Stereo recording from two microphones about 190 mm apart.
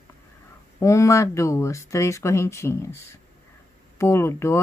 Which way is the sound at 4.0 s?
15° left (ahead or behind).